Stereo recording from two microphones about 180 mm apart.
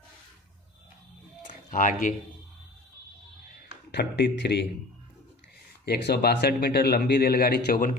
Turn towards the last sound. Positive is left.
turn(degrees=50)  # may be behind; listen again after turning